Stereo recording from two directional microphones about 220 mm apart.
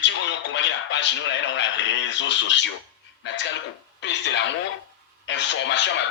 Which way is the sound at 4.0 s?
55° left (ahead or behind).